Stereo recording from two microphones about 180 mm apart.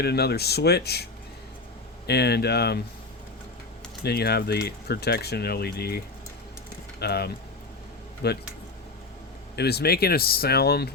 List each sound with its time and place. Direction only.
0.0 s speech: 65° left (ahead or behind)
2.0 s speech: 65° left (ahead or behind)
4.0 s speech: 60° left (ahead or behind)
7.0 s speech: 65° left (ahead or behind)
9.6 s speech: 65° left (ahead or behind)